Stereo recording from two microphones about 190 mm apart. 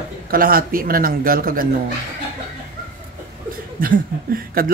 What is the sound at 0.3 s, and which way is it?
A man's voice, 50° right (ahead or behind).